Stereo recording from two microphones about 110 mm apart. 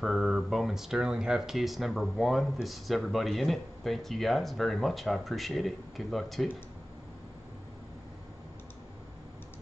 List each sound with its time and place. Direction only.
0.0 s speech: 5° right (ahead or behind)